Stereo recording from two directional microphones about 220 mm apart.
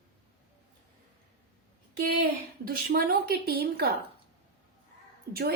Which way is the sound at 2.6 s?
45° right (ahead or behind).